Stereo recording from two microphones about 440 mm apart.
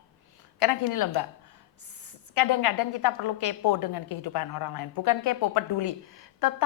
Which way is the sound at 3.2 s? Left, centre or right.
Left.